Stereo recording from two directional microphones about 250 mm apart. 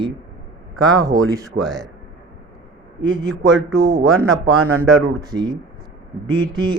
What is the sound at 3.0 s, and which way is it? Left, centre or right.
Speech, centre.